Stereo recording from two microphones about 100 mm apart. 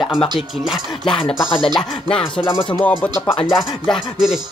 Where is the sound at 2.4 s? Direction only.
60° left (ahead or behind).